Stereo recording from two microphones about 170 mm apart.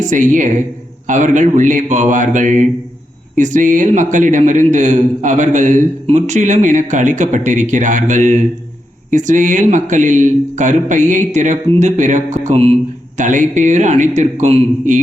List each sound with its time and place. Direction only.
0.0 s a man's voice: 50° right (ahead or behind)